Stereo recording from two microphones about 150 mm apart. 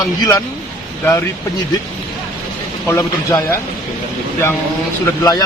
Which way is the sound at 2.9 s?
20° left (ahead or behind).